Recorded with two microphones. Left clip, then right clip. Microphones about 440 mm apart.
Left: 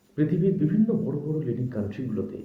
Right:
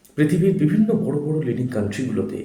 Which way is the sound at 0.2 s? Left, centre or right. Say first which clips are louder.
Right 6 dB; left.